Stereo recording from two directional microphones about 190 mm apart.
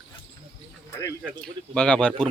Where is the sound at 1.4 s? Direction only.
5° left (ahead or behind).